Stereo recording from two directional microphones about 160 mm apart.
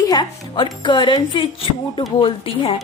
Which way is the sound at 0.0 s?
25° left (ahead or behind).